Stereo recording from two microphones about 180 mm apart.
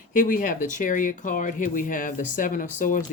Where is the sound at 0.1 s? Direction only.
50° left (ahead or behind).